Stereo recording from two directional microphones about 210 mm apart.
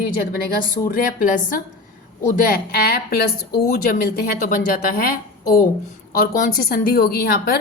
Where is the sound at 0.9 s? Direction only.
40° left (ahead or behind).